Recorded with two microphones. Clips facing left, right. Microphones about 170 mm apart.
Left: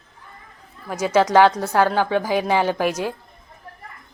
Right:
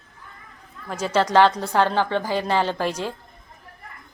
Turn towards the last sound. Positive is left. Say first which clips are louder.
# left 3 dB
turn(degrees=10)  # may be behind; listen again after turning